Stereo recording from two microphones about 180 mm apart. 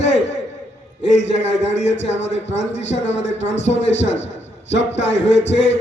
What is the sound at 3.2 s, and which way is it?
Speech, 80° left.